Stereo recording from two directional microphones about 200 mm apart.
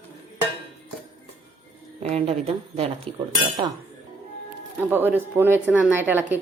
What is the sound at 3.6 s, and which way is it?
Speech, 20° right (ahead or behind).